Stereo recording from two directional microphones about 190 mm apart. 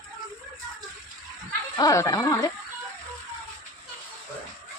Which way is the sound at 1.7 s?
20° left (ahead or behind).